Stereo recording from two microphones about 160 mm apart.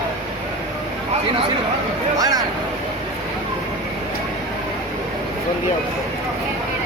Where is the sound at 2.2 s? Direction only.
25° right (ahead or behind).